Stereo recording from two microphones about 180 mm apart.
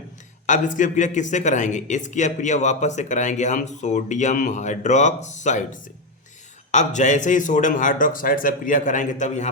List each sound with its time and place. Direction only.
0.4 s a man's voice: 45° left (ahead or behind)